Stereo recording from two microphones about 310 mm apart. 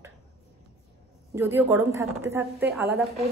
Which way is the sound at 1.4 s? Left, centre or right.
Centre.